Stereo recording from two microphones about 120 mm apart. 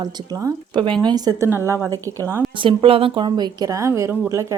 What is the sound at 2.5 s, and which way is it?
Speech, 50° right (ahead or behind).